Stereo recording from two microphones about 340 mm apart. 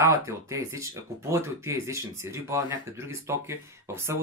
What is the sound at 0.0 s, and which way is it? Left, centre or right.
Speech, centre.